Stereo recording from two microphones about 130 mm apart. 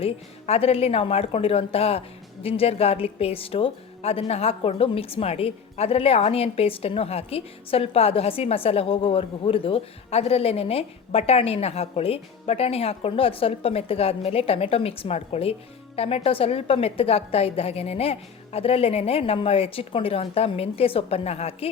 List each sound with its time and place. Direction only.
0.0 s a woman's voice: 50° left (ahead or behind)